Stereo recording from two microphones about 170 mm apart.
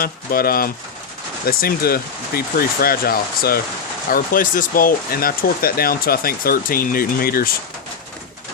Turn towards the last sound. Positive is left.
turn(degrees=60)  # may be behind; listen again after turning